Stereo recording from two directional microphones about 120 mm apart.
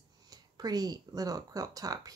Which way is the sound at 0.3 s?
35° right (ahead or behind).